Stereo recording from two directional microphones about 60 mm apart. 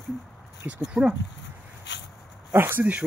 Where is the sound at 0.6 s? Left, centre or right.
Right.